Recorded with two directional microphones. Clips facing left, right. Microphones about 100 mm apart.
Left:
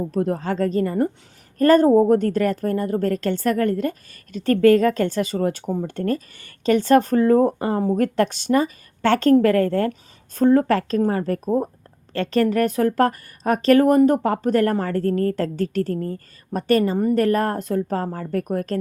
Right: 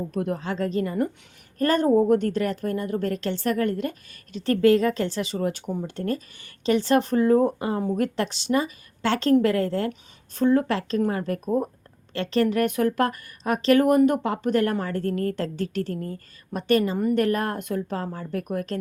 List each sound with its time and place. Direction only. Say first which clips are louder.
0.0 s a woman's voice: left 5 dB; 35° left (ahead or behind)
5.9 s a woman's voice: left 4 dB; 50° left (ahead or behind); by 11.7 s 30° left (ahead or behind)
12.1 s a woman's voice: left 3 dB; 45° left (ahead or behind)